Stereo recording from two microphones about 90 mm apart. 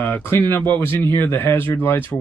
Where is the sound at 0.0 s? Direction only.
25° left (ahead or behind).